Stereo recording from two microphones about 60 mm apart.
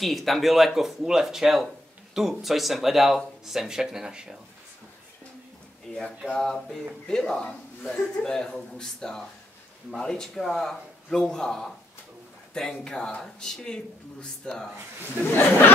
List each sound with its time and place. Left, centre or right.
0.0 s speech: centre
5.9 s a man's voice: centre
15.2 s speech: left